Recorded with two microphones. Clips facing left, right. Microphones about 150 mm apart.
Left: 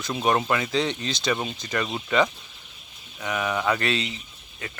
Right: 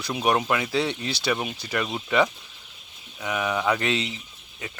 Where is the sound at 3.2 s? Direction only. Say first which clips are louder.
Even; 10° right (ahead or behind).